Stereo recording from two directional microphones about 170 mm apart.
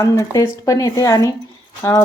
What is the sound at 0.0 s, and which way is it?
Speech, 20° left (ahead or behind).